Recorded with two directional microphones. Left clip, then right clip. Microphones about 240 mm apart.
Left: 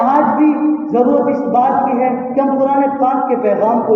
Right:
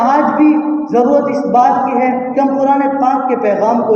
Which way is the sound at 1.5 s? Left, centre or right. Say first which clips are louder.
Right 3 dB; right.